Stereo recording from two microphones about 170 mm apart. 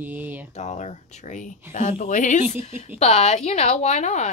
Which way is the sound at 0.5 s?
45° left (ahead or behind).